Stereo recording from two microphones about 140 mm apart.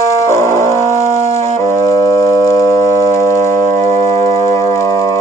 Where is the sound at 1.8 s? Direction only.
20° left (ahead or behind).